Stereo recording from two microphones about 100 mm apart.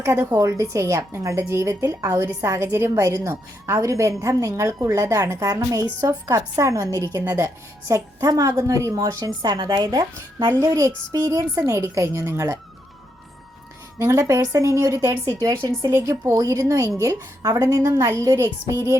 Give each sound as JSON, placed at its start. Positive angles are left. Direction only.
{"t": 0.0, "sound": "a woman's voice", "side_deg": -30}
{"t": 14.0, "sound": "a woman's voice", "side_deg": -30}